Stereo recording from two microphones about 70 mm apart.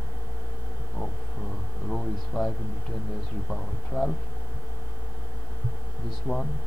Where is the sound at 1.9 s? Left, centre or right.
Centre.